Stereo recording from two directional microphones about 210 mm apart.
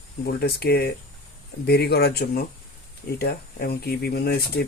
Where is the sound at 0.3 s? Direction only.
50° left (ahead or behind).